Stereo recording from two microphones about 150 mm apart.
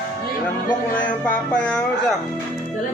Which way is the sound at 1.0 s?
10° left (ahead or behind).